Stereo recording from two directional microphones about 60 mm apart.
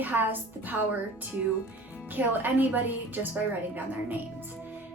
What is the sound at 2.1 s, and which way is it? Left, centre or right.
Speech, right.